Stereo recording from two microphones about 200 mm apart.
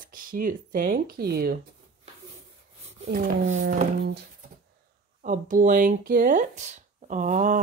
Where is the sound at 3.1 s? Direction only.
40° right (ahead or behind).